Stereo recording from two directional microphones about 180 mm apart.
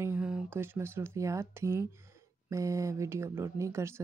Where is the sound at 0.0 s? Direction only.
10° right (ahead or behind).